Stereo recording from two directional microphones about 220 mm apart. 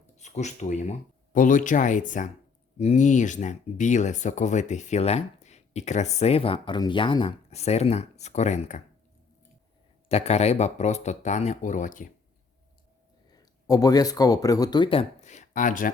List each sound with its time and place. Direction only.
0.2 s speech: 30° left (ahead or behind)
10.1 s speech: 30° left (ahead or behind)
13.3 s speech: 15° left (ahead or behind); by 15.9 s 35° left (ahead or behind)